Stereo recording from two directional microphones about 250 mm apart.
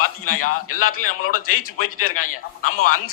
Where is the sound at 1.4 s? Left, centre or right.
Left.